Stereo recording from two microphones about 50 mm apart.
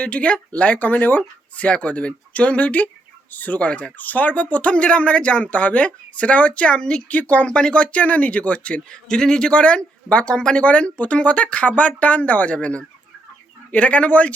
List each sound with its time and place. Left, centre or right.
0.0 s speech: left